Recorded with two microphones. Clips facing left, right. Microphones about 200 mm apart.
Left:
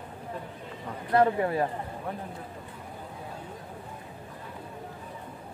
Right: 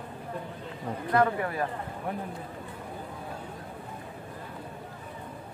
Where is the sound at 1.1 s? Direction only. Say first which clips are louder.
Left 3 dB; 25° left (ahead or behind).